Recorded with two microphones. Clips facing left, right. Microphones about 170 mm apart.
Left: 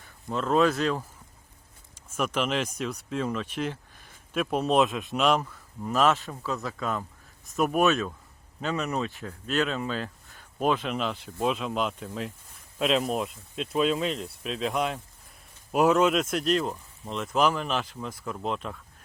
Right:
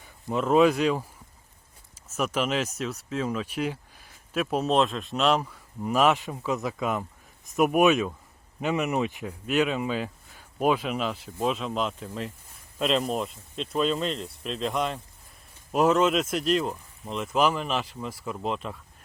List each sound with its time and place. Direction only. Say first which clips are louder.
0.0 s speech: right 3 dB; 15° right (ahead or behind)
2.1 s speech: right 1 dB; 5° right (ahead or behind)
5.4 s speech: right 2 dB; 10° right (ahead or behind)